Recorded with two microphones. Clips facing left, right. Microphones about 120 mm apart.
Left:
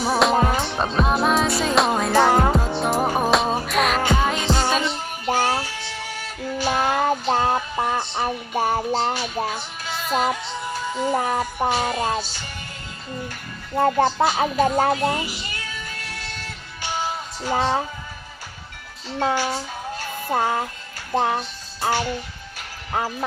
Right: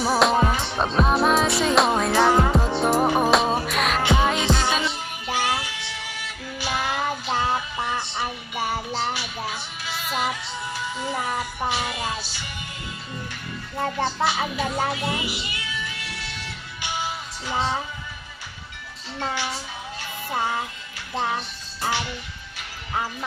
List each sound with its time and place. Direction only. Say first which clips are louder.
0.0 s music: left 1 dB; centre (ahead or behind)
0.3 s music: left 2 dB; 40° left (ahead or behind)
0.8 s music: right 2 dB; centre (ahead or behind)
4.5 s music: left 2 dB; 45° left (ahead or behind)
13.7 s music: left 7 dB; 45° left (ahead or behind)
19.2 s a child's voice: left 6 dB; 50° left (ahead or behind)